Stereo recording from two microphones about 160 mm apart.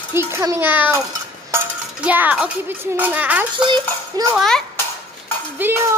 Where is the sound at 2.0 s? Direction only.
10° right (ahead or behind).